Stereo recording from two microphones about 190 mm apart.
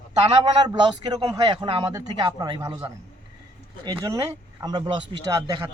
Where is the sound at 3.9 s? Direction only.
15° right (ahead or behind).